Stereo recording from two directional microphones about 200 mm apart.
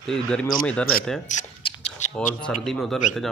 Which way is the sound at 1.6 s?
35° left (ahead or behind).